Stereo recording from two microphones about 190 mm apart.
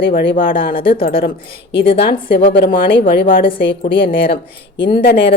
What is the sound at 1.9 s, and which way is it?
Speech, 60° left (ahead or behind).